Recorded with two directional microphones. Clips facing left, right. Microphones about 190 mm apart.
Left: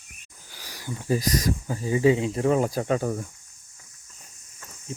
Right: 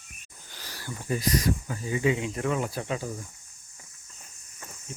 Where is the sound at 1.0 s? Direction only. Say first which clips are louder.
Left 2 dB; 35° left (ahead or behind); by 3.2 s 50° left (ahead or behind).